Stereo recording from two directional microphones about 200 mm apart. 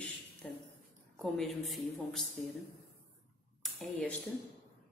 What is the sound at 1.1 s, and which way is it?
A woman's voice, centre (ahead or behind).